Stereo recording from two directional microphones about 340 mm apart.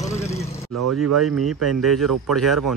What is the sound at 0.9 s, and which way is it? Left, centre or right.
Speech, right.